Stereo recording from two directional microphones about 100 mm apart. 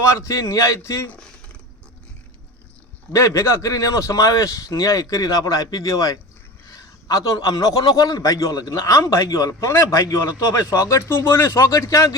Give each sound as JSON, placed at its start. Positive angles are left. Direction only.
{"t": 0.0, "sound": "a man's voice", "side_deg": 30}
{"t": 3.1, "sound": "a man's voice", "side_deg": 35}